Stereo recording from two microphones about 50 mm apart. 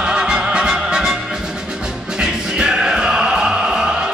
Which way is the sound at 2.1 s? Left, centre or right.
Centre.